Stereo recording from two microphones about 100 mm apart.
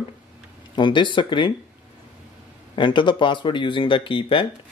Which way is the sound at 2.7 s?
55° left (ahead or behind).